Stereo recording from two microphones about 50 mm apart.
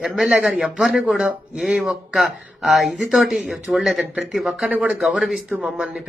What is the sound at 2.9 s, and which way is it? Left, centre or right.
Speech, centre.